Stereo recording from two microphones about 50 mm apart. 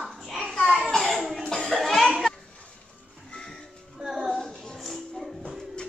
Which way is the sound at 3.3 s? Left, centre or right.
Centre.